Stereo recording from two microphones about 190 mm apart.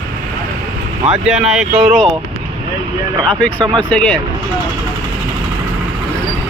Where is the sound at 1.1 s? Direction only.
5° right (ahead or behind).